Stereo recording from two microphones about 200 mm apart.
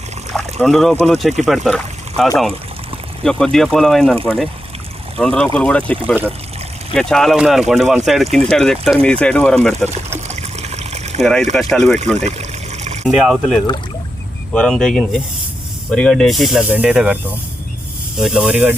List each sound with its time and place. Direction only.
0.6 s speech: centre (ahead or behind)
9.9 s water: 35° right (ahead or behind)
11.2 s speech: 5° left (ahead or behind)
12.1 s trickle: 35° right (ahead or behind)
13.1 s speech: 5° right (ahead or behind)
18.2 s speech: 5° right (ahead or behind)